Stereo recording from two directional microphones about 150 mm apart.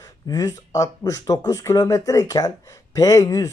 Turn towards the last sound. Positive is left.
turn(degrees=25)  # may be behind; listen again after turning